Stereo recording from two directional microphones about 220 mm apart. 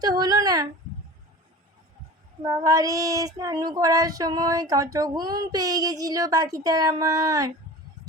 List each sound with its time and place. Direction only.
0.0 s female singing: 15° right (ahead or behind)
2.4 s female singing: 15° right (ahead or behind)